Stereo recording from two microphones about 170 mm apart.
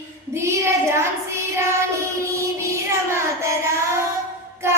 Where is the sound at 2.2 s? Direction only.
15° right (ahead or behind).